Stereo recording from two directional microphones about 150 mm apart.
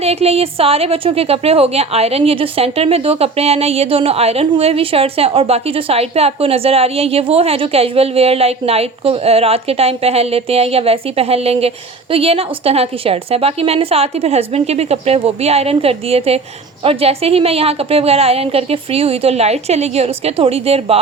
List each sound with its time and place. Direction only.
0.0 s a woman's voice: 45° right (ahead or behind)